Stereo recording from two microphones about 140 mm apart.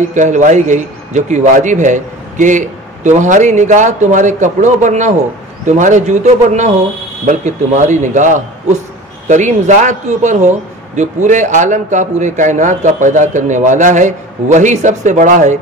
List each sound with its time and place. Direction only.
0.1 s a man's voice: 60° right (ahead or behind)